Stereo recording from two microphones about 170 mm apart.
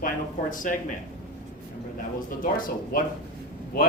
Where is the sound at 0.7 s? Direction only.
50° left (ahead or behind).